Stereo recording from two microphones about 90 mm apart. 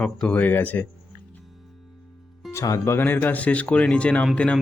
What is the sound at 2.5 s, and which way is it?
Speech, 35° left (ahead or behind).